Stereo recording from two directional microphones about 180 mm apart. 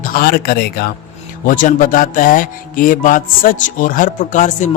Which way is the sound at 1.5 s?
45° left (ahead or behind).